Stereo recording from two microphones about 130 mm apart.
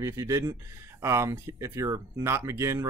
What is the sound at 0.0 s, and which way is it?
Speech, 25° right (ahead or behind).